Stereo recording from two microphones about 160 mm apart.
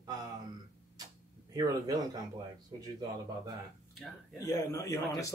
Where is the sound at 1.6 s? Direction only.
25° right (ahead or behind).